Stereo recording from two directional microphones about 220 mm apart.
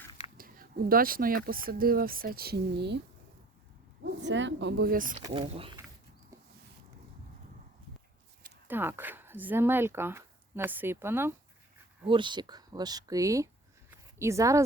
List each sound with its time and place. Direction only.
0.3 s speech: 40° right (ahead or behind)
4.2 s speech: 55° right (ahead or behind); by 5.2 s 40° right (ahead or behind)
5.2 s speech: 25° right (ahead or behind)
8.6 s speech: 10° right (ahead or behind)
12.0 s speech: 20° right (ahead or behind)